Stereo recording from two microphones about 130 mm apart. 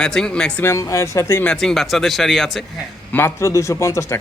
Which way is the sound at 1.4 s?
5° left (ahead or behind).